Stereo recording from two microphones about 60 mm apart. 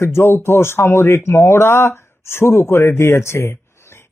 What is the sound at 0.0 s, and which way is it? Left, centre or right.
Speech, left.